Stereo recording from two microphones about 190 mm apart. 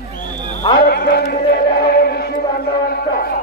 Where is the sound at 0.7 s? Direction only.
55° left (ahead or behind).